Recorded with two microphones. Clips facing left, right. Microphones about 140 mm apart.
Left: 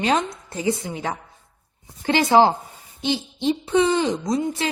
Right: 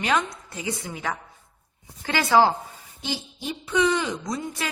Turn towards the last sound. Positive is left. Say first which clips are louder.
# left 7 dB
turn(degrees=25)  # may be behind; listen again after turning